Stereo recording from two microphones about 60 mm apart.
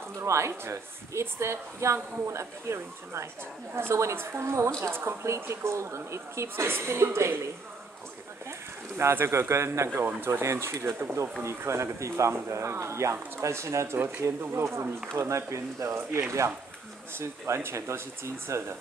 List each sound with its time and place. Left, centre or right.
0.2 s a woman's voice: right
8.5 s a woman's voice: right
13.9 s speech: right
14.2 s a woman's voice: right
16.1 s speech: right
17.6 s a woman's voice: right